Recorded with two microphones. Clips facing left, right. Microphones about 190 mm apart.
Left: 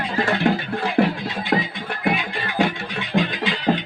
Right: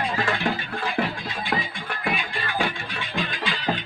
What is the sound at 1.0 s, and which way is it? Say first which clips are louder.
Music: left 8 dB; 45° left (ahead or behind).